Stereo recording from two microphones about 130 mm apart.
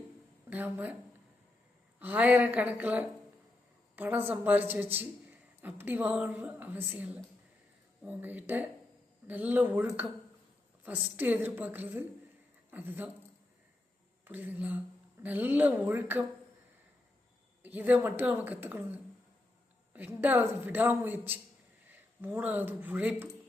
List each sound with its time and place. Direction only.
0.5 s speech: 15° right (ahead or behind)
2.0 s a man's voice: 15° right (ahead or behind)
14.3 s a man's voice: 15° right (ahead or behind)
17.6 s a man's voice: 15° right (ahead or behind)